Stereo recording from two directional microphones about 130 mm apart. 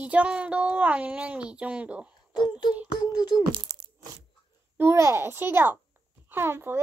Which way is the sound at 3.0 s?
30° left (ahead or behind).